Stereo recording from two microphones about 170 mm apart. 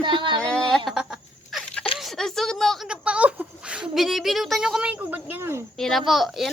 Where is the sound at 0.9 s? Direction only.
5° right (ahead or behind).